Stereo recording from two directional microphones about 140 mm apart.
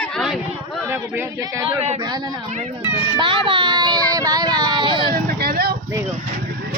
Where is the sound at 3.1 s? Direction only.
35° right (ahead or behind).